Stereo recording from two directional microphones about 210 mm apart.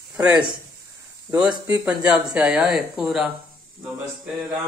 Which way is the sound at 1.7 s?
5° right (ahead or behind).